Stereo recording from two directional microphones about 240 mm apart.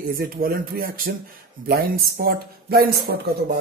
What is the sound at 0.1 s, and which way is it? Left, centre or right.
A man's voice, right.